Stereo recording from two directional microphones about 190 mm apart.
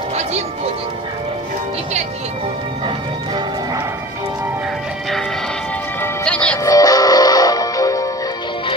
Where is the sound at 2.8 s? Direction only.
25° right (ahead or behind).